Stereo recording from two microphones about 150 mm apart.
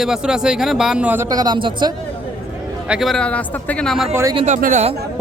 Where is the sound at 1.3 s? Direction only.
25° right (ahead or behind).